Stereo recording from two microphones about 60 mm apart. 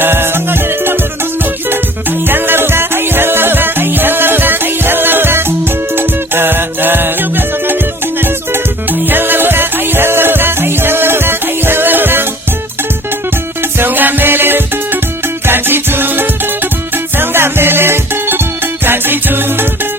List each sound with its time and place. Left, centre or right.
0.0 s music: right
13.6 s music: right